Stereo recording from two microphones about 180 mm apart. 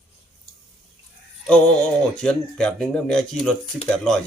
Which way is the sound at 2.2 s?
5° left (ahead or behind).